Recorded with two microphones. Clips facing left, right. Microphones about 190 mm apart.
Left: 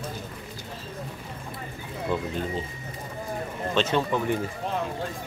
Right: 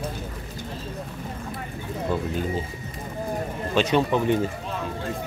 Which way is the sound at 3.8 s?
15° right (ahead or behind).